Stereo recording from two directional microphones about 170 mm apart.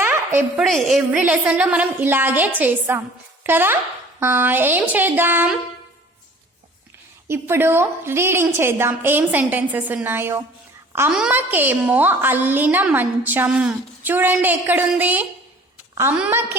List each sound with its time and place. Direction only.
0.3 s a woman's voice: 5° right (ahead or behind)
7.3 s a woman's voice: 15° right (ahead or behind)